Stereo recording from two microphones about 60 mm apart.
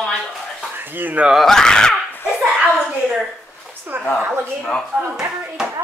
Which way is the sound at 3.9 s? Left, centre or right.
Right.